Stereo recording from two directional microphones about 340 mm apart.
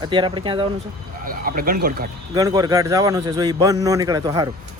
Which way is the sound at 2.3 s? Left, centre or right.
Centre.